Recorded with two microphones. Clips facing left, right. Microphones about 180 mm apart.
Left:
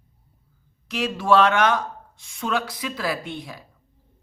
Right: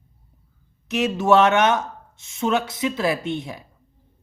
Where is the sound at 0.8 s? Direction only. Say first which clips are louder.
Right 4 dB; 25° right (ahead or behind).